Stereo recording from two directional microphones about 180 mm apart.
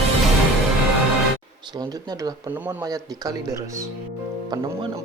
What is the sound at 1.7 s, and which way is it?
Speech, 20° right (ahead or behind).